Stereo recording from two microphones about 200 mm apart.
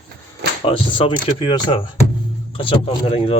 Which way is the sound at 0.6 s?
25° left (ahead or behind).